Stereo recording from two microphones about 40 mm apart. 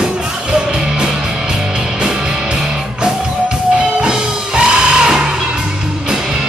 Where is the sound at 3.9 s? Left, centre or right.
Centre.